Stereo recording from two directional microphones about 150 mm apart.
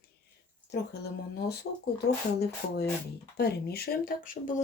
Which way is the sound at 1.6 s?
90° left.